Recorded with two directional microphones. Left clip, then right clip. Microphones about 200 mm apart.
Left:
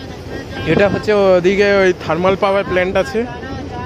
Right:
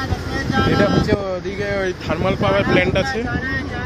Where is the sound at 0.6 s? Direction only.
50° left (ahead or behind); by 3.2 s 35° left (ahead or behind).